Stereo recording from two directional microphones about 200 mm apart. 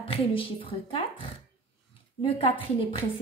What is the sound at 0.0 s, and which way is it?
A woman's voice, 30° left (ahead or behind).